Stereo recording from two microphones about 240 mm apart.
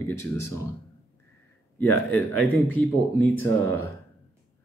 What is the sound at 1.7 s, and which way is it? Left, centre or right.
Speech, centre.